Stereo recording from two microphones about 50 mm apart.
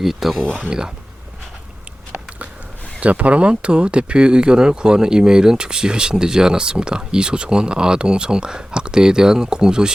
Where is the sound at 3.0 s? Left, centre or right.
Right.